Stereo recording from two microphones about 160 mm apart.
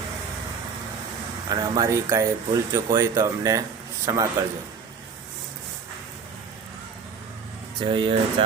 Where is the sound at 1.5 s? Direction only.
20° right (ahead or behind).